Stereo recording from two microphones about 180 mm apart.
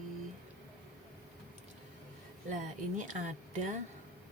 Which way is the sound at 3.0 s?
45° right (ahead or behind).